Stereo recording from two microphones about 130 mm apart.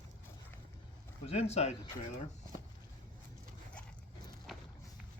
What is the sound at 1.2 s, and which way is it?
Speech, 55° left (ahead or behind).